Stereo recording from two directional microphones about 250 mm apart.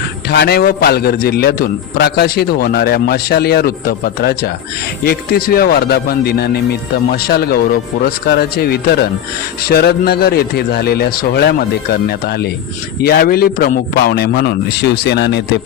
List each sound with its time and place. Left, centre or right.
0.3 s a man's voice: left